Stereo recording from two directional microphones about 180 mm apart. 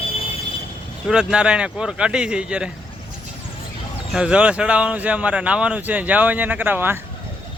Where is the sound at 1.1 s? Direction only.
5° right (ahead or behind).